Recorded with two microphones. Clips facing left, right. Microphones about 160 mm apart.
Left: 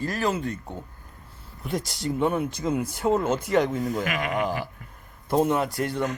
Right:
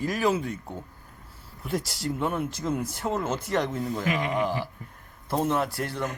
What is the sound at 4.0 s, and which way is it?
Speech, 25° right (ahead or behind).